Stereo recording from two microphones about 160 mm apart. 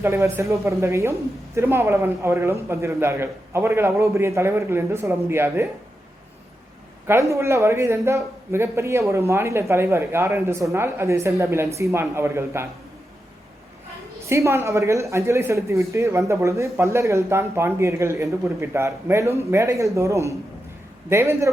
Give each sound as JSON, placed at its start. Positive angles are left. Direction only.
{"t": 0.0, "sound": "a man's voice", "side_deg": -15}
{"t": 7.1, "sound": "a man's voice", "side_deg": -20}
{"t": 14.3, "sound": "a man's voice", "side_deg": -15}